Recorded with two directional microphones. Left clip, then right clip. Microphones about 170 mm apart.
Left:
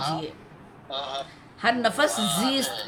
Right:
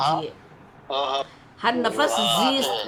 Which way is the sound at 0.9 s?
40° right (ahead or behind).